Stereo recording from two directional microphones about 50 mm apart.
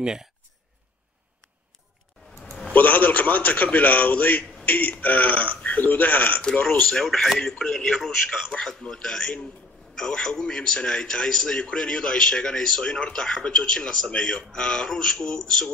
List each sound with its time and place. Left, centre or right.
0.0 s speech: centre
2.7 s a man's voice: left
6.4 s speech: centre
6.9 s a man's voice: centre